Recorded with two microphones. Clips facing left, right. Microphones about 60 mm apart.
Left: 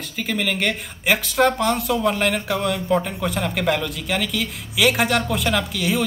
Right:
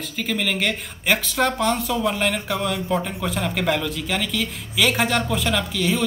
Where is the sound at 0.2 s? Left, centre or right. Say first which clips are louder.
Left 1 dB; centre.